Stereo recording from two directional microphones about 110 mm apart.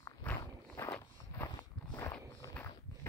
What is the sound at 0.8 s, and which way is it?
Walk, 20° left (ahead or behind).